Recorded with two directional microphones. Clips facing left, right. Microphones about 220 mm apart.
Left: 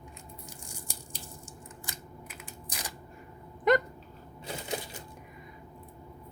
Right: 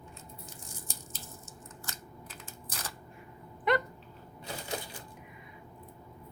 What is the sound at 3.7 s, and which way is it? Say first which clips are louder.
Dog: left 4 dB; 40° left (ahead or behind).